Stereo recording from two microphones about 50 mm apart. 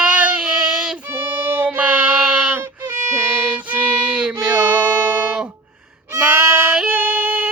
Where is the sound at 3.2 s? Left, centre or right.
Right.